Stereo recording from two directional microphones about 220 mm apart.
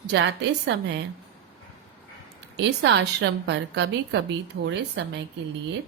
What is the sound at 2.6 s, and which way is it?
A woman's voice, 50° right (ahead or behind).